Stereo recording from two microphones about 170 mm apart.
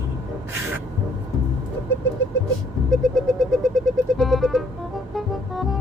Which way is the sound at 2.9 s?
5° left (ahead or behind).